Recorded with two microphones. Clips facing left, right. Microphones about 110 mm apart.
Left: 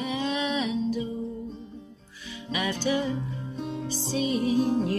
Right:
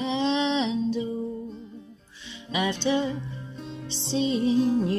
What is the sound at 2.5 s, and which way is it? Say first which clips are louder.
Music: right 2 dB; 25° right (ahead or behind).